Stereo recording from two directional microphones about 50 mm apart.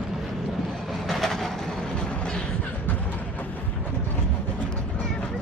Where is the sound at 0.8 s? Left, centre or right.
Centre.